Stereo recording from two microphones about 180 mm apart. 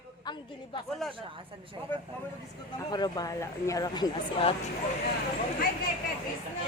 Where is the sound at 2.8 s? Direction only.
20° left (ahead or behind).